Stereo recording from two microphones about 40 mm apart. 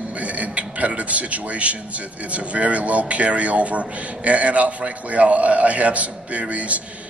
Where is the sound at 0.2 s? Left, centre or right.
Right.